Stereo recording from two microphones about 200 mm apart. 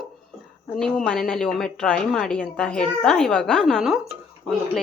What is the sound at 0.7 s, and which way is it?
A woman's voice, 5° left (ahead or behind).